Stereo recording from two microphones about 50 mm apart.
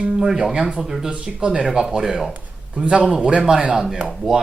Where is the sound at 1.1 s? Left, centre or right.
Centre.